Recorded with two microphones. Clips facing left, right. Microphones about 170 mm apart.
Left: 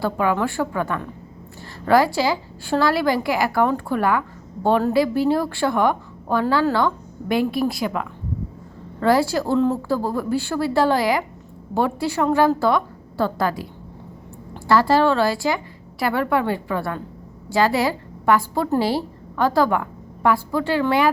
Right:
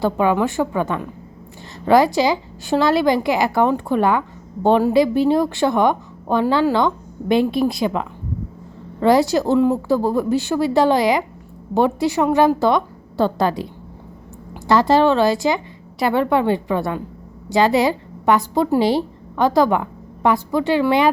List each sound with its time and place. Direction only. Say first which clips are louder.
0.0 s a woman's voice: right 3 dB; 20° right (ahead or behind)
14.7 s a woman's voice: right 2 dB; 20° right (ahead or behind)